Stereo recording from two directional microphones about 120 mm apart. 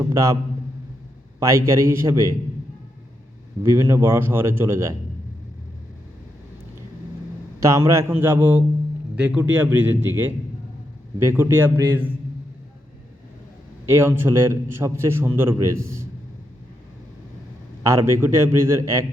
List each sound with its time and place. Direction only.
0.0 s a sound: 25° right (ahead or behind)
1.4 s a man's voice: 25° right (ahead or behind)
3.6 s a man's voice: 25° right (ahead or behind)
7.6 s a man's voice: 25° right (ahead or behind)
13.8 s a man's voice: 20° right (ahead or behind)
17.8 s a man's voice: 25° right (ahead or behind)